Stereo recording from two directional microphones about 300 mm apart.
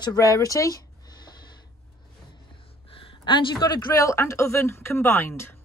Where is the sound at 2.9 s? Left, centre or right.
Centre.